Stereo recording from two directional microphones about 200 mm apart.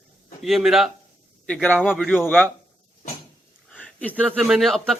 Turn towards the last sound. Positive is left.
turn(degrees=0)  # may be behind; listen again after turning